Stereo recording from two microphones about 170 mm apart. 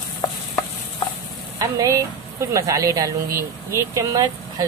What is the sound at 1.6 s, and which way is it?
Speech, 20° right (ahead or behind).